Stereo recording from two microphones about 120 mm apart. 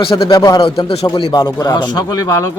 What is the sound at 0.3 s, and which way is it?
Speech, 30° left (ahead or behind).